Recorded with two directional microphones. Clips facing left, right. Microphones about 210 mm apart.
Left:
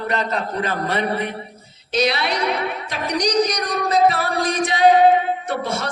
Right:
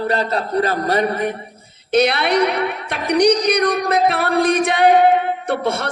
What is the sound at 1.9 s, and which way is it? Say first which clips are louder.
A woman's voice: right 5 dB; 60° right (ahead or behind).